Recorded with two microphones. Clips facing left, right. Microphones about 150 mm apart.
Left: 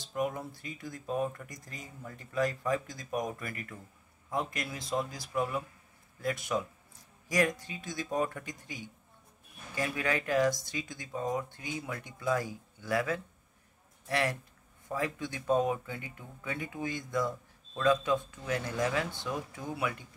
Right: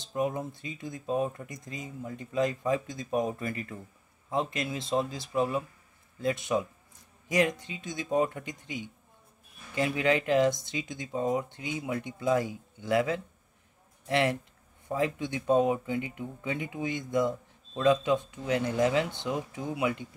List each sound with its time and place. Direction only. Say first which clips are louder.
0.0 s speech: right 3 dB; 25° right (ahead or behind)